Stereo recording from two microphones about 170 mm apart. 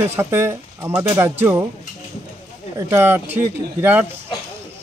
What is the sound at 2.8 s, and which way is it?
Speech, 15° right (ahead or behind).